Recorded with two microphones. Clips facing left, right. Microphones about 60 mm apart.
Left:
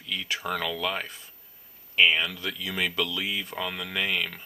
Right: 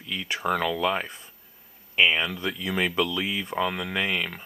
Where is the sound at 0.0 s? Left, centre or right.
Centre.